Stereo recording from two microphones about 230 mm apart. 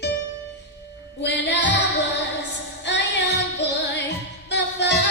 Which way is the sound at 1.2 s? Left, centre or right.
Left.